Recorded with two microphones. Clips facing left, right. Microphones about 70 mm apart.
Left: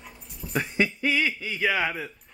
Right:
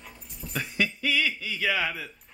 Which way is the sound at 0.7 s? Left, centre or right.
Left.